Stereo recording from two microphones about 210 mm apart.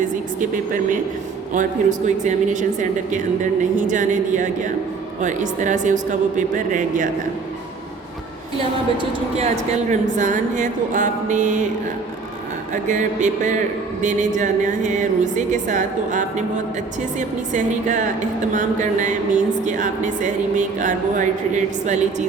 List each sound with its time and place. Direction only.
0.0 s a sound: 40° right (ahead or behind)
1.5 s a woman's voice: 35° right (ahead or behind)
3.8 s a woman's voice: 35° right (ahead or behind)
9.0 s a woman's voice: 30° right (ahead or behind)
12.7 s a woman's voice: 35° right (ahead or behind)